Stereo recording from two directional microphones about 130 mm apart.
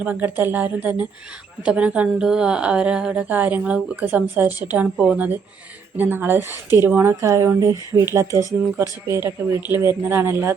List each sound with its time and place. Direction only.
0.0 s a woman's voice: 15° right (ahead or behind)